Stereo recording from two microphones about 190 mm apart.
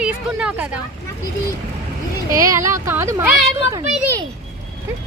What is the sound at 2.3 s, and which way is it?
Speech, 15° right (ahead or behind).